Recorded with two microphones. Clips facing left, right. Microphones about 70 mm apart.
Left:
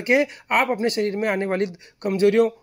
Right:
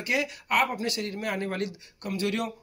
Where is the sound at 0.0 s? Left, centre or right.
Left.